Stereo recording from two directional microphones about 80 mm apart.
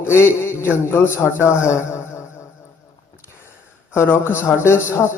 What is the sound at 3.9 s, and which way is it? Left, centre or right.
Speech, left.